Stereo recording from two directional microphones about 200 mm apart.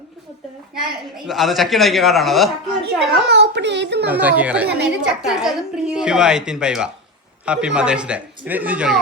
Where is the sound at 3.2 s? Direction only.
60° right (ahead or behind).